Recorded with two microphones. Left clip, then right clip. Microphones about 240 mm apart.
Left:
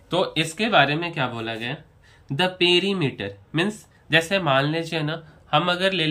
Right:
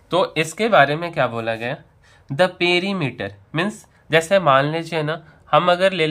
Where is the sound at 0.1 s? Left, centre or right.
Centre.